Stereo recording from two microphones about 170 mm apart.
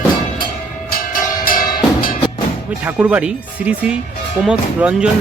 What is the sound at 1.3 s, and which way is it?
Drum, 55° left (ahead or behind).